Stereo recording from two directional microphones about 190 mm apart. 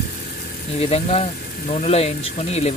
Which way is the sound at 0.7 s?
30° left (ahead or behind).